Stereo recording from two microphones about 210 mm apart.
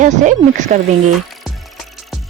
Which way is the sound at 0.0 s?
35° right (ahead or behind).